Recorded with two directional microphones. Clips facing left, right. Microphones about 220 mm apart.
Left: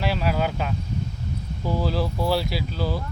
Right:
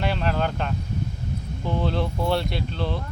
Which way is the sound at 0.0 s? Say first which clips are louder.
Left 1 dB; 5° left (ahead or behind).